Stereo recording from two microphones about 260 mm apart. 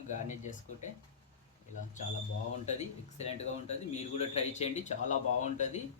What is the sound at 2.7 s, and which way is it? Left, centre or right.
Speech, left.